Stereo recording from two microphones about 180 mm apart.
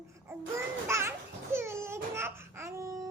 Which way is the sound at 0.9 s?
15° right (ahead or behind).